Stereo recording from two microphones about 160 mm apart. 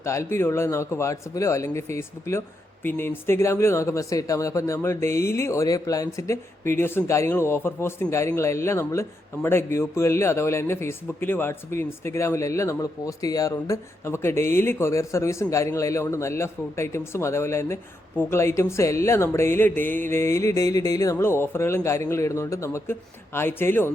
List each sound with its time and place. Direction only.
0.0 s a man's voice: 15° left (ahead or behind)